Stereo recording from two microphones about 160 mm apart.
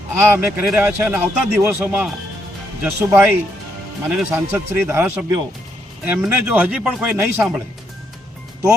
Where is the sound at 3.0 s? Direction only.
10° right (ahead or behind).